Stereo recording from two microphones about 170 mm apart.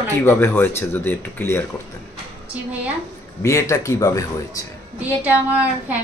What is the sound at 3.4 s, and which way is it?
Speech, 15° left (ahead or behind).